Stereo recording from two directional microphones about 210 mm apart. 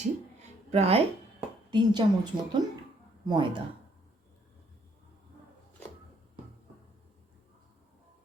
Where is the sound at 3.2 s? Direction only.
20° right (ahead or behind).